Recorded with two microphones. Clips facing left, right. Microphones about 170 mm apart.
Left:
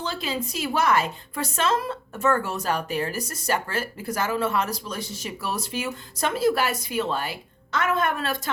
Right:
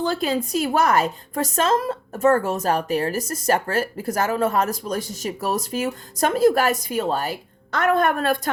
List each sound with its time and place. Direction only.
0.0 s a woman's voice: 45° right (ahead or behind)